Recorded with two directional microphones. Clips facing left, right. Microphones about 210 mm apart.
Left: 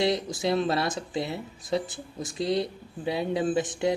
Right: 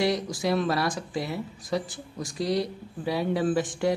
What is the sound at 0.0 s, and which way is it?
Speech, 25° left (ahead or behind).